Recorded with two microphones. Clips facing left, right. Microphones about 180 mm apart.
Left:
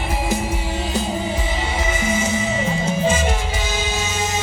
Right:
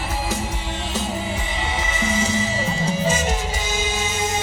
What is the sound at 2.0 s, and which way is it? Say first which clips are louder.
Music: right 1 dB; 30° right (ahead or behind).